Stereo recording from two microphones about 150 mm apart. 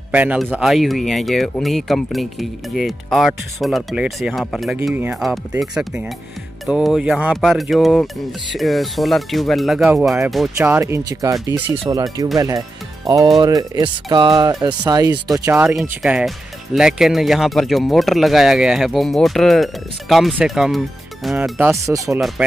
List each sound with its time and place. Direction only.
0.1 s speech: 10° right (ahead or behind)
4.9 s speech: 10° right (ahead or behind)
10.6 s speech: 15° right (ahead or behind)
11.4 s speech: 10° right (ahead or behind)
11.9 s speech: 25° right (ahead or behind)
15.7 s speech: 5° right (ahead or behind)
21.4 s speech: 10° right (ahead or behind)
21.7 s speech: 20° right (ahead or behind)